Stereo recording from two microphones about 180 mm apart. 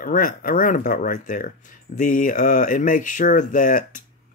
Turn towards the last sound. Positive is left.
turn(degrees=50)  # may be behind; listen again after turning